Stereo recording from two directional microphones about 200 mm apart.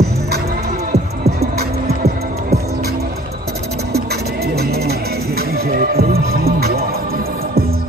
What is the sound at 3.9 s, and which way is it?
Music, 50° right (ahead or behind).